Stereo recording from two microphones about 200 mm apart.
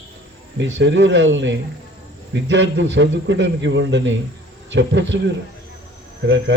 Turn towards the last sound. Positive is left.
turn(degrees=-60)  # may be behind; listen again after turning